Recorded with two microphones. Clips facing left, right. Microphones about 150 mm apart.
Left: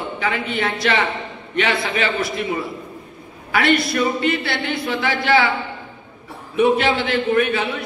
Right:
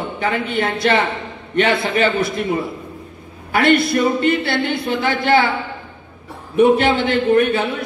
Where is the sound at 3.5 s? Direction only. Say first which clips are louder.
Right 3 dB; 55° right (ahead or behind).